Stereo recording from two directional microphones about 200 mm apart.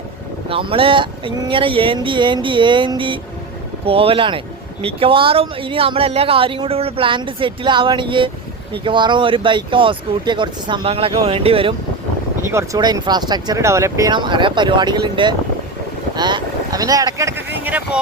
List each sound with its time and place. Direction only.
0.4 s speech: 25° right (ahead or behind)
12.5 s speech: 15° right (ahead or behind)
16.1 s boat: 20° right (ahead or behind)